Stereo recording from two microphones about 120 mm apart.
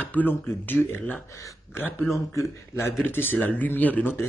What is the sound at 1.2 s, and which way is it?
A man's voice, 25° left (ahead or behind).